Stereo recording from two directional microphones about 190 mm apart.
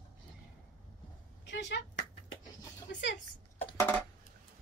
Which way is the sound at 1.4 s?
75° left (ahead or behind).